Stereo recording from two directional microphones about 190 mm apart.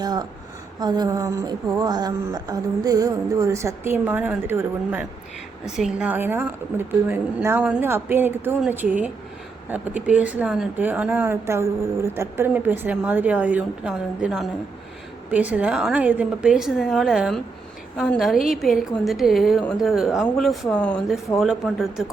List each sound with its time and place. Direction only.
0.0 s speech: 20° right (ahead or behind)
0.8 s a sound: 20° right (ahead or behind)
1.8 s a woman's voice: 20° right (ahead or behind); by 22.0 s centre (ahead or behind)